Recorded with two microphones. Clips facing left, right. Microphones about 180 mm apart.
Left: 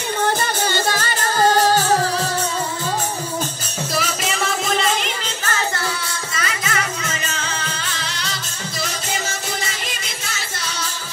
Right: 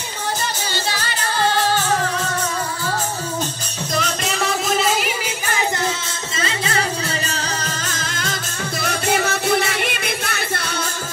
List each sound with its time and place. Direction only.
0.2 s music: 55° left (ahead or behind)
3.9 s music: 5° left (ahead or behind); by 5.7 s 10° right (ahead or behind)
6.3 s music: 30° right (ahead or behind); by 8.4 s 45° right (ahead or behind)
8.8 s music: 60° right (ahead or behind)